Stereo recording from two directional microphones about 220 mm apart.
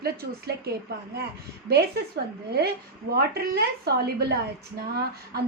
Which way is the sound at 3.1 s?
45° right (ahead or behind).